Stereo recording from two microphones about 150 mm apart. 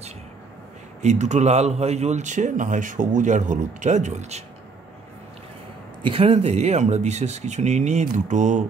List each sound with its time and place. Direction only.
1.0 s speech: 50° right (ahead or behind)
6.0 s speech: 40° right (ahead or behind)